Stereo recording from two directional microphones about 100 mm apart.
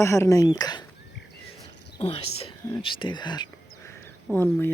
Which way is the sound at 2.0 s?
75° left (ahead or behind).